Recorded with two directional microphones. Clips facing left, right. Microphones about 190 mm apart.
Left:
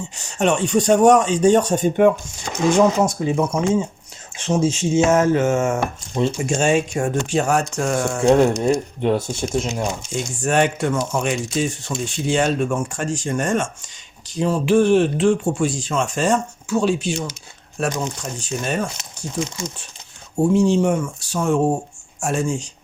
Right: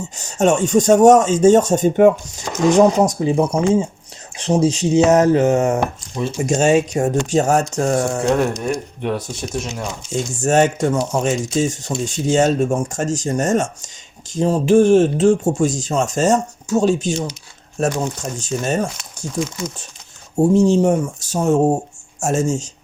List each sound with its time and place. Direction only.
0.2 s speech: 45° right (ahead or behind)
8.3 s speech: 25° left (ahead or behind)
10.3 s speech: 45° right (ahead or behind)
20.3 s speech: 40° right (ahead or behind)